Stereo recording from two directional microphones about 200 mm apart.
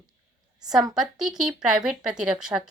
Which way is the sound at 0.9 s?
Centre (ahead or behind).